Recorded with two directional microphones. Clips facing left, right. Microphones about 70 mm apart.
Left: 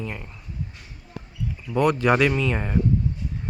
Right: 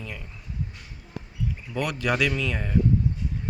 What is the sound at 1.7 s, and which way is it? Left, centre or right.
Speech, left.